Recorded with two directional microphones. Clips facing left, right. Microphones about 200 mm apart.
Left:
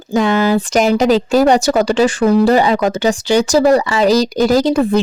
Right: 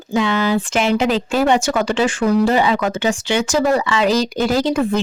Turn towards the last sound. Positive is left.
turn(degrees=35)  # may be behind; listen again after turning